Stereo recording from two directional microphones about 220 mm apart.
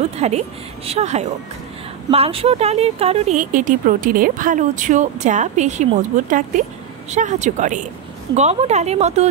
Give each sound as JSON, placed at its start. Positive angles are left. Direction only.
{"t": 0.2, "sound": "speech", "side_deg": -30}